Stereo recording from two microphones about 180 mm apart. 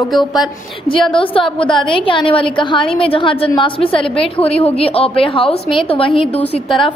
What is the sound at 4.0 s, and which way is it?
Speech, 5° left (ahead or behind).